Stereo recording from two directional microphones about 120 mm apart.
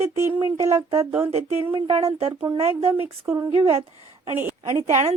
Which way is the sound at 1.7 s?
50° right (ahead or behind).